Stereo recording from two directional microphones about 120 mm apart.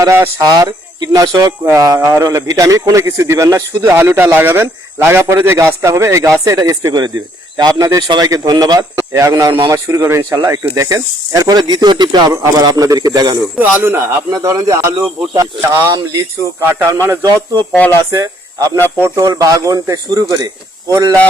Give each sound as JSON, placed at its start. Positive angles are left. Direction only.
{"t": 0.0, "sound": "speech", "side_deg": -25}
{"t": 13.6, "sound": "speech", "side_deg": -15}
{"t": 17.2, "sound": "speech", "side_deg": -35}
{"t": 18.1, "sound": "speech", "side_deg": -25}